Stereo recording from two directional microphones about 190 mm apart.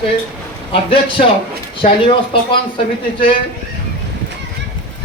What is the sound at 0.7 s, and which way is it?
Speech, 30° left (ahead or behind).